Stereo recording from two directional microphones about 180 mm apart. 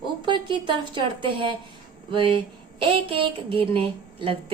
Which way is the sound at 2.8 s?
30° right (ahead or behind).